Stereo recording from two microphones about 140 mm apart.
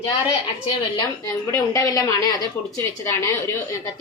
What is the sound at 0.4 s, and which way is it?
Speech, 35° left (ahead or behind).